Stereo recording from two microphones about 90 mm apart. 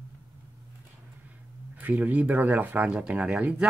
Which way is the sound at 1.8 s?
15° right (ahead or behind).